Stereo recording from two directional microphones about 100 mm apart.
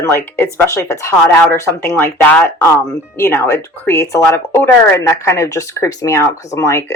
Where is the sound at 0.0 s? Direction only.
25° left (ahead or behind).